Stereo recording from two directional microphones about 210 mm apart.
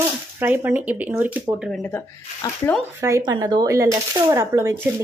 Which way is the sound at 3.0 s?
15° right (ahead or behind).